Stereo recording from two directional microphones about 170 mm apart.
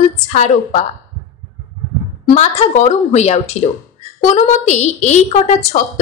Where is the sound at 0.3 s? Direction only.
45° left (ahead or behind).